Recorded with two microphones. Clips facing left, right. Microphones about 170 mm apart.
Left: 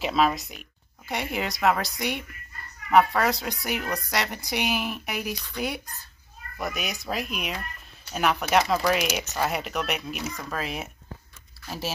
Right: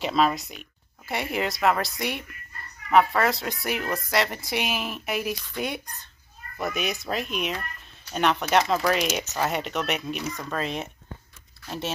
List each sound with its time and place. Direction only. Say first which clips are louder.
0.0 s a woman's voice: even; centre (ahead or behind)